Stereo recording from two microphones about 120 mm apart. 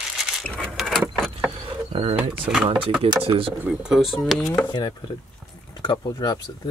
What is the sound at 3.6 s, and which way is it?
Speech, 10° right (ahead or behind).